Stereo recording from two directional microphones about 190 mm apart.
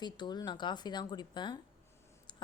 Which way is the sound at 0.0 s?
20° left (ahead or behind).